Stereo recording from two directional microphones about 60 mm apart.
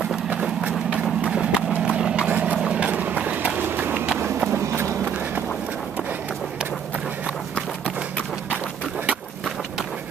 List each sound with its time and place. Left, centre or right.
0.8 s clip-clop: centre
2.2 s vehicle: right
2.6 s run: right
3.6 s run: right